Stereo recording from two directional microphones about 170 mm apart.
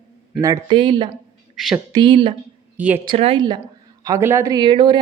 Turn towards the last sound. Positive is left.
turn(degrees=-25)  # may be behind; listen again after turning